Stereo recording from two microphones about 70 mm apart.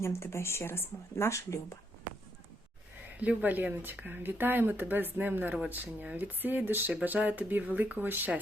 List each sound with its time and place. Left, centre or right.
0.0 s speech: left
3.2 s speech: right